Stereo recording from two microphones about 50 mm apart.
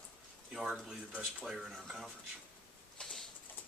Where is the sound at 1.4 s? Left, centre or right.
Centre.